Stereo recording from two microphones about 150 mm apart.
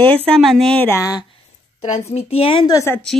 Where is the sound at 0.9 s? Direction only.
20° left (ahead or behind).